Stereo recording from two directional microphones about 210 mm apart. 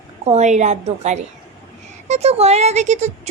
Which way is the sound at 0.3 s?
35° right (ahead or behind).